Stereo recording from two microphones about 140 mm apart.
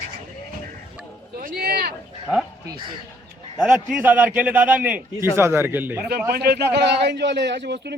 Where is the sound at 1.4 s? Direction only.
90° right.